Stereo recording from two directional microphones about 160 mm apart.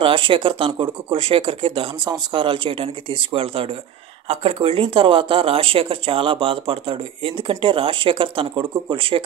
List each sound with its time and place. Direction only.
0.0 s speech: 35° right (ahead or behind)